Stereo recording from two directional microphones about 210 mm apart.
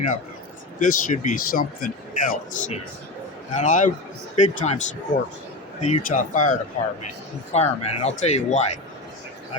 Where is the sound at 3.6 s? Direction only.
35° left (ahead or behind).